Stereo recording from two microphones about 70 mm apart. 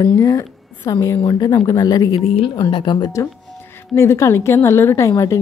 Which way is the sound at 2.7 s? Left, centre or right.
Left.